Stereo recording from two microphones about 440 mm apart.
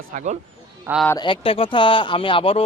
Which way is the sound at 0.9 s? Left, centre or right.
Centre.